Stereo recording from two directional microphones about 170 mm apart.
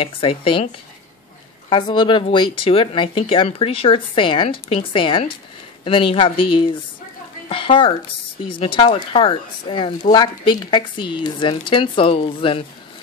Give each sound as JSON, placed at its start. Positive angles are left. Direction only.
{"t": 0.0, "sound": "a woman's voice", "side_deg": 35}